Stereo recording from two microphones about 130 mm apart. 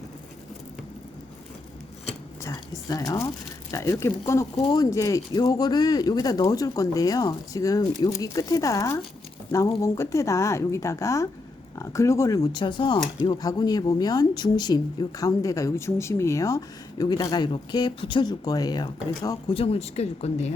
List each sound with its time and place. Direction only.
2.4 s speech: 25° left (ahead or behind)
19.5 s speech: 50° left (ahead or behind)